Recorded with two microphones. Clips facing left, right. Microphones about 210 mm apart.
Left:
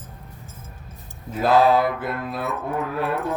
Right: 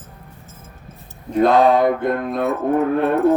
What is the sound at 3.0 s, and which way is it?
Music, 25° right (ahead or behind).